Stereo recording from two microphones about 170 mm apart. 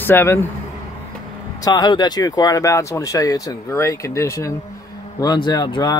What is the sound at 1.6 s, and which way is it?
Speech, 25° left (ahead or behind).